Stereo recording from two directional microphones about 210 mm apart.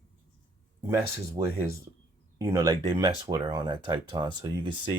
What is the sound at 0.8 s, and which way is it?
Speech, 10° right (ahead or behind).